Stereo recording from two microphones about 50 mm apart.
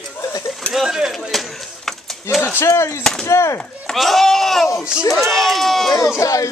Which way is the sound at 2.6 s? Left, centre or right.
Left.